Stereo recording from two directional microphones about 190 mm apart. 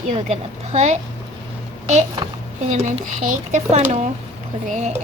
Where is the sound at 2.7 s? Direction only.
40° right (ahead or behind).